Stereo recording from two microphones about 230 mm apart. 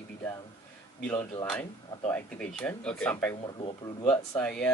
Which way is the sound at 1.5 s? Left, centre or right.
Centre.